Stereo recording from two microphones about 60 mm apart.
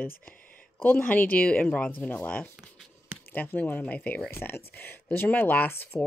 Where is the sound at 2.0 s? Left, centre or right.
Left.